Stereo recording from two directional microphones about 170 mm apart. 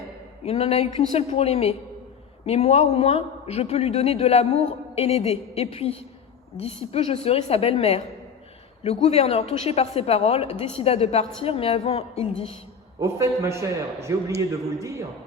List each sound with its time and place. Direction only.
0.4 s a man's voice: 35° left (ahead or behind)
13.0 s a man's voice: 15° right (ahead or behind)